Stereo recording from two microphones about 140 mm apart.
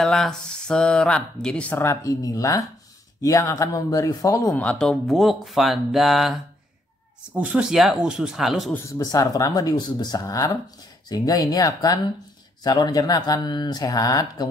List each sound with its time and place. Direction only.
0.0 s speech: 5° left (ahead or behind); by 4.6 s 25° left (ahead or behind)
4.6 s speech: 5° left (ahead or behind)
8.7 s speech: 20° left (ahead or behind)